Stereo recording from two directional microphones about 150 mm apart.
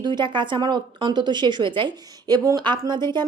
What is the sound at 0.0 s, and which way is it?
A woman's voice, 30° right (ahead or behind).